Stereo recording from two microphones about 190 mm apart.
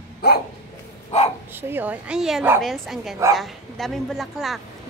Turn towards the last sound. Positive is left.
turn(degrees=0)  # may be behind; listen again after turning